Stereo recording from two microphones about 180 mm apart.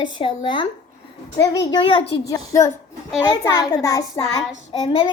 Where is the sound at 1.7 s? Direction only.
30° left (ahead or behind).